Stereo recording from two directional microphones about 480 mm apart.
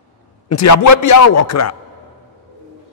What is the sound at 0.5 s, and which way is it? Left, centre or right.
A man's voice, left.